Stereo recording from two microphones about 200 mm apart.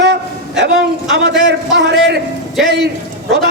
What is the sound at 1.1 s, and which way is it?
A man's voice, 60° right (ahead or behind).